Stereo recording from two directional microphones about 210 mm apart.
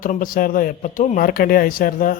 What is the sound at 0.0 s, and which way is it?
Speech, 40° left (ahead or behind).